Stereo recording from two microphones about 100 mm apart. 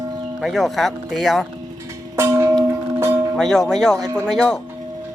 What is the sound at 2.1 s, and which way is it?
Music, 30° right (ahead or behind).